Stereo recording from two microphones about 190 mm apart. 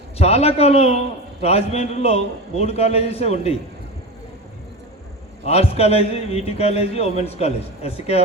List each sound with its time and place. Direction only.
0.2 s a man's voice: 35° left (ahead or behind)
5.5 s a man's voice: 35° left (ahead or behind)